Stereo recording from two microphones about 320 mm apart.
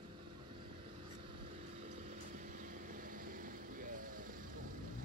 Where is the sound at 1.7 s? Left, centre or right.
Right.